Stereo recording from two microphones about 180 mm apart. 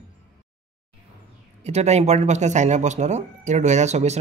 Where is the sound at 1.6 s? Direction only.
40° right (ahead or behind).